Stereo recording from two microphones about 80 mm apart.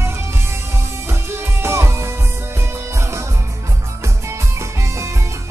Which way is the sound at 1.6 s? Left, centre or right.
Right.